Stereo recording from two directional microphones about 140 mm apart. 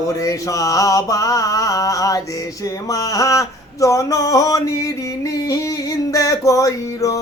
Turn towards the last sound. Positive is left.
turn(degrees=25)  # may be behind; listen again after turning